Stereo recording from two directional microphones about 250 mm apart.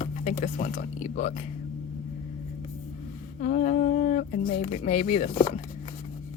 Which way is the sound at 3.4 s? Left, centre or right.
Left.